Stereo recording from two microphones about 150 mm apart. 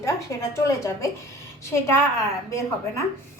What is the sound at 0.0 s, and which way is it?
Speech, 20° left (ahead or behind).